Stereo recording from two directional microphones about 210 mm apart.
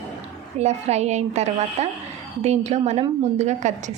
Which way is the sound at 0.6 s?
30° right (ahead or behind).